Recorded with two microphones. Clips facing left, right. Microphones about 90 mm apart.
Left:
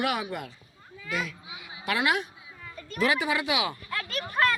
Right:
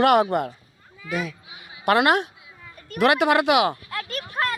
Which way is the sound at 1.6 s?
55° right (ahead or behind).